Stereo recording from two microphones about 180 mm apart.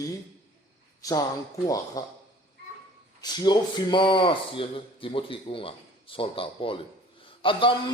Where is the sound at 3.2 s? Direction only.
25° left (ahead or behind).